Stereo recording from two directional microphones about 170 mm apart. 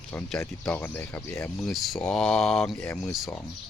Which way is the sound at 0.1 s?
5° left (ahead or behind).